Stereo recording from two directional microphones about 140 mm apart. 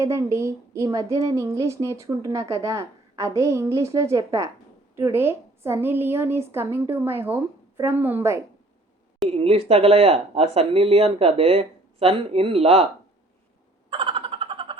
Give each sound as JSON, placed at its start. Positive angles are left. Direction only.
{"t": 0.0, "sound": "a woman's voice", "side_deg": -20}
{"t": 9.3, "sound": "speech", "side_deg": -45}
{"t": 13.9, "sound": "vehicle", "side_deg": -40}